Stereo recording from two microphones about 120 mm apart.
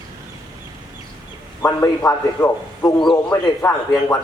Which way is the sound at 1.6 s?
25° left (ahead or behind).